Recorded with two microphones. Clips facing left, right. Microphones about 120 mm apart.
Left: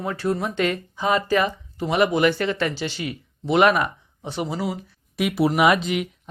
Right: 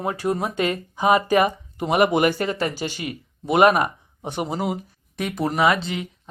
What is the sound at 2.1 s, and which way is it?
Speech, 45° right (ahead or behind).